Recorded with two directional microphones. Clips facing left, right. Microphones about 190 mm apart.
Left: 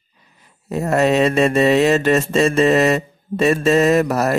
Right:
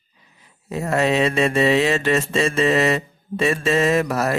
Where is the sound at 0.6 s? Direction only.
45° left (ahead or behind).